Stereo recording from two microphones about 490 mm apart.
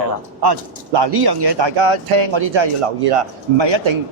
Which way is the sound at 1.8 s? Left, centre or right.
Right.